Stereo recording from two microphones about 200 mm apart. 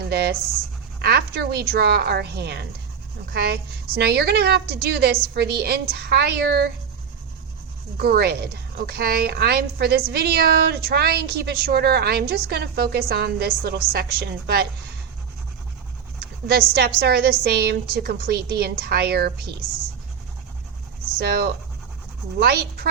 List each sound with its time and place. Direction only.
0.0 s a woman's voice: 55° right (ahead or behind)
7.9 s a woman's voice: 50° right (ahead or behind)
16.5 s a woman's voice: 50° right (ahead or behind)
21.2 s a woman's voice: 55° right (ahead or behind)